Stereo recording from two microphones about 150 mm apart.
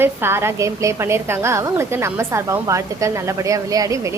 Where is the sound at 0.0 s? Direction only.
15° right (ahead or behind).